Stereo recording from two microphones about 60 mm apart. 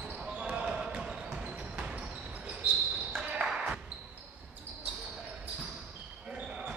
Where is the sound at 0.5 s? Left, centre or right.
Centre.